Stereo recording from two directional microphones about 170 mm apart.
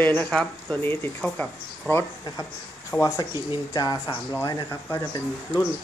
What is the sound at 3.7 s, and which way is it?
Speech, 25° left (ahead or behind).